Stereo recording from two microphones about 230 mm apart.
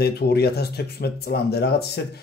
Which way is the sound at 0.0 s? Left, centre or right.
Left.